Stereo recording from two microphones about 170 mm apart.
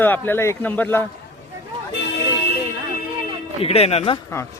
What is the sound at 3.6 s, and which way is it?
Speech, 35° left (ahead or behind).